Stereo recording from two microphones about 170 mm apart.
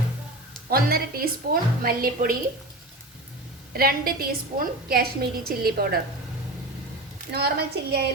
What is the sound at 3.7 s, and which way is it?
A woman's voice, 60° right (ahead or behind).